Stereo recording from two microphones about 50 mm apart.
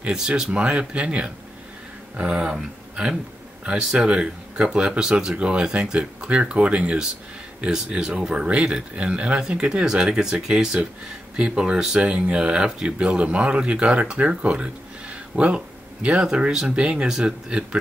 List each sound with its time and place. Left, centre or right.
0.0 s speech: centre
3.6 s speech: centre